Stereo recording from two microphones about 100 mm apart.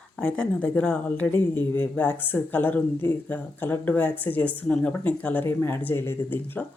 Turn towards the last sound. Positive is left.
turn(degrees=20)  # may be behind; listen again after turning